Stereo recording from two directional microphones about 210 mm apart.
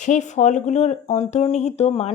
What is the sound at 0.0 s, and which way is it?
Speech, 35° left (ahead or behind).